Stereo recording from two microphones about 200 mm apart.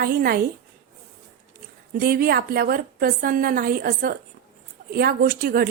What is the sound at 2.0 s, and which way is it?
Speech, 50° right (ahead or behind).